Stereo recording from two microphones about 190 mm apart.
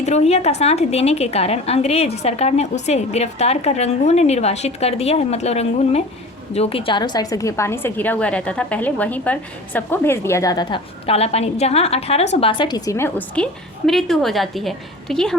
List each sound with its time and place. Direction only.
0.0 s a woman's voice: 35° left (ahead or behind); by 15.4 s centre (ahead or behind)